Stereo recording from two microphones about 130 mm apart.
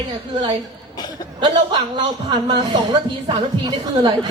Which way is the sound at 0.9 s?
35° left (ahead or behind).